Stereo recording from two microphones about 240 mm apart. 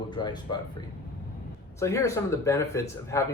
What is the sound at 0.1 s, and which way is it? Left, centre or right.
Speech, centre.